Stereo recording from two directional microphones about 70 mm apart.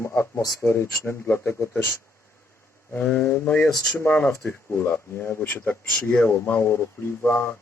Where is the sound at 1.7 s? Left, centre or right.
Left.